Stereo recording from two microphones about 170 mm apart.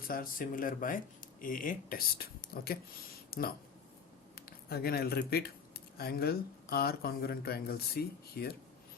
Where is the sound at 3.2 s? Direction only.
60° left (ahead or behind).